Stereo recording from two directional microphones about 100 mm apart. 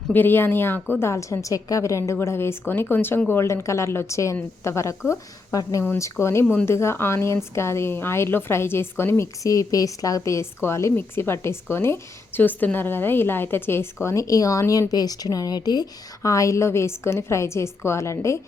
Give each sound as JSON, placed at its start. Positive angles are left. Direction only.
{"t": 0.1, "sound": "a woman's voice", "side_deg": 20}